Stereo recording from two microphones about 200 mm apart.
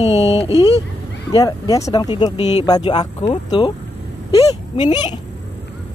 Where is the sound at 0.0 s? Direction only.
30° left (ahead or behind).